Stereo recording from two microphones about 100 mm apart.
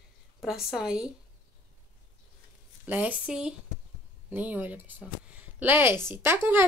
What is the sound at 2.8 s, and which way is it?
Speech, 15° right (ahead or behind).